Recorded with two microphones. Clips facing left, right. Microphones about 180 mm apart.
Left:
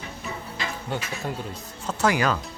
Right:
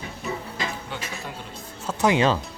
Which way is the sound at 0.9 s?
45° left (ahead or behind).